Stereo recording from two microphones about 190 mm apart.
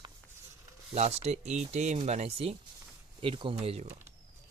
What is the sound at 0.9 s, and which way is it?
Speech, 35° right (ahead or behind).